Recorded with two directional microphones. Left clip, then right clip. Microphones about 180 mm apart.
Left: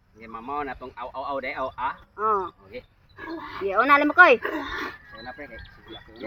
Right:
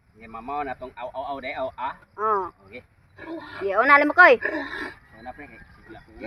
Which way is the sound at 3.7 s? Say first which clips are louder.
Right 2 dB; 40° left (ahead or behind).